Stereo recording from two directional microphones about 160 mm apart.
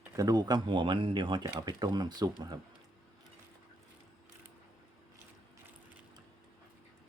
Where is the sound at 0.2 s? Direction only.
25° right (ahead or behind).